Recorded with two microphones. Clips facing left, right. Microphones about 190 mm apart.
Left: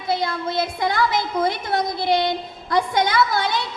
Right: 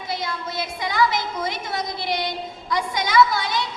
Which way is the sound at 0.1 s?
55° left (ahead or behind).